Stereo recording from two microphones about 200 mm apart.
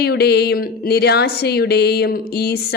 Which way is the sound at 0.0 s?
55° left (ahead or behind).